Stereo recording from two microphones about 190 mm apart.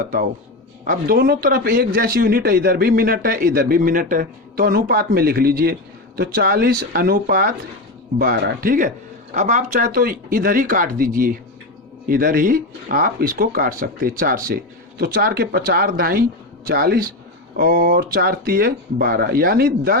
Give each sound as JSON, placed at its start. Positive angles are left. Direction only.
{"t": 0.9, "sound": "speech", "side_deg": -50}